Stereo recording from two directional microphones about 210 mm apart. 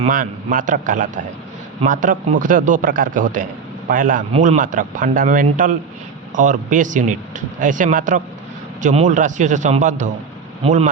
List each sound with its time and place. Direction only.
0.0 s speech: 40° right (ahead or behind)